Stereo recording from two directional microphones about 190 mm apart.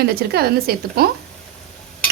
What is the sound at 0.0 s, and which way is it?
Cutlery, 55° right (ahead or behind).